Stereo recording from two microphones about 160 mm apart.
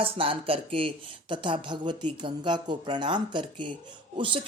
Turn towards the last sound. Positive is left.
turn(degrees=-30)  # may be behind; listen again after turning